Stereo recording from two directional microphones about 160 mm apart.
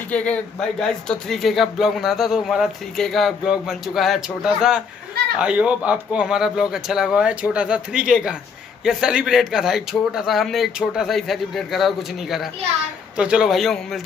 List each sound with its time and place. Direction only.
0.1 s speech: 10° left (ahead or behind)